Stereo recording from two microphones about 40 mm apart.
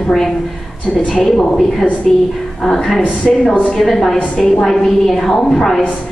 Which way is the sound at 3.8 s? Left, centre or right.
Centre.